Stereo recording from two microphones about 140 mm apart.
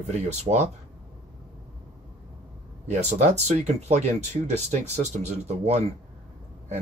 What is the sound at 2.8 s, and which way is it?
A man's voice, 55° right (ahead or behind).